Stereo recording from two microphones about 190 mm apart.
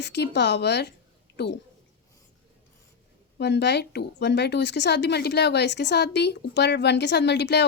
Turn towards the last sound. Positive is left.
turn(degrees=65)  # may be behind; listen again after turning